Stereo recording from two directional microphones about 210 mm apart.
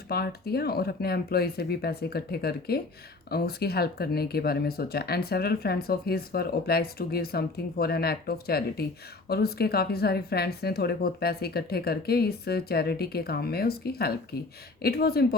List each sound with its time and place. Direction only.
0.1 s speech: 50° left (ahead or behind)